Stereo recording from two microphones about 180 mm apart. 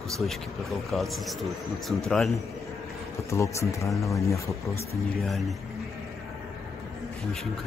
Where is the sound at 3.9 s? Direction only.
Centre (ahead or behind).